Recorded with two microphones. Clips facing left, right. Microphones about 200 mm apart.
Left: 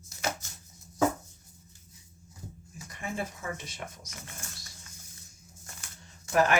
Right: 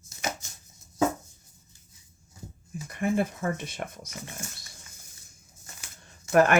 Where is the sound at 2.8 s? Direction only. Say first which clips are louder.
Right 9 dB; 55° right (ahead or behind).